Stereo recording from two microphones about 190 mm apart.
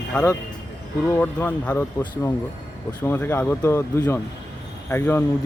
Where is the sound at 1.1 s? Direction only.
10° left (ahead or behind).